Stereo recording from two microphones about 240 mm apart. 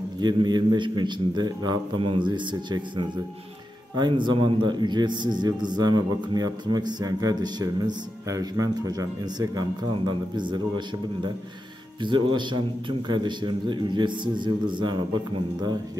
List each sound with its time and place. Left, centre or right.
0.2 s a man's voice: centre
12.0 s a man's voice: centre